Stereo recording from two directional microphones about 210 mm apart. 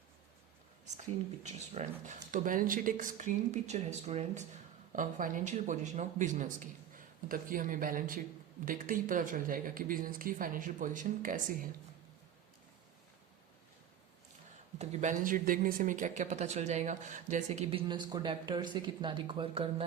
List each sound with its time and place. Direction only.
1.7 s speech: 35° right (ahead or behind)
14.8 s speech: 40° right (ahead or behind)